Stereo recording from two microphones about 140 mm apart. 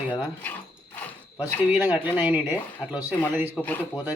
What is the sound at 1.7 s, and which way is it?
A man's voice, 15° right (ahead or behind).